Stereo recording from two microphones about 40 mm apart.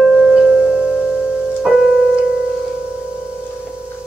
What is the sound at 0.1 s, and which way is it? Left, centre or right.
Singing bowl, centre.